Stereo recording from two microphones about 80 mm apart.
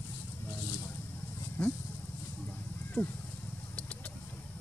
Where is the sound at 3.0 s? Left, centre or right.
Left.